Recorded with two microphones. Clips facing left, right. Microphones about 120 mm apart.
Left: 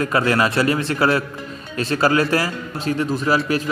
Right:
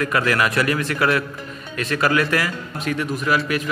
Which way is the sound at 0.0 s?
30° left (ahead or behind).